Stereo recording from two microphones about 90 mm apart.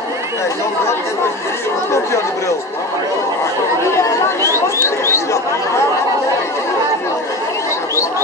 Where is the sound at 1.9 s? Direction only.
30° left (ahead or behind).